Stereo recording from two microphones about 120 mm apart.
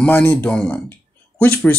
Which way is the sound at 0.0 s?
15° left (ahead or behind).